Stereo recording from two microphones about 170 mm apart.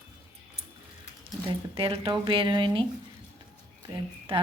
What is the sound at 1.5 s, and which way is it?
A woman's voice, 30° right (ahead or behind).